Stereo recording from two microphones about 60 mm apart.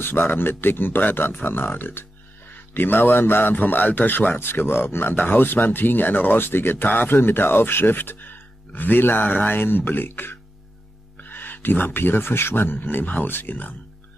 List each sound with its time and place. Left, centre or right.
0.0 s speech: left